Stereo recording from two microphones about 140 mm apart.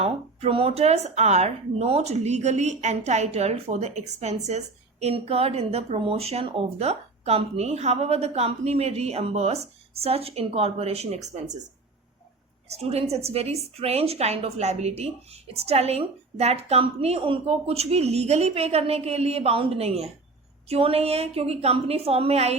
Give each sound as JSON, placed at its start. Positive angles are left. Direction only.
{"t": 0.0, "sound": "speech", "side_deg": -45}
{"t": 12.6, "sound": "a woman's voice", "side_deg": -50}